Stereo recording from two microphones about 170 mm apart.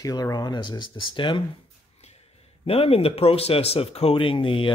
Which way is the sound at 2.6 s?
35° left (ahead or behind).